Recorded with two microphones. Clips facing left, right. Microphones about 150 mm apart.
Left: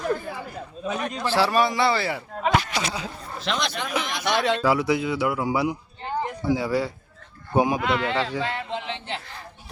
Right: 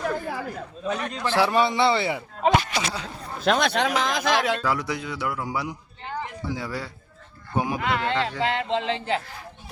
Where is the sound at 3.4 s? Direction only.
50° right (ahead or behind).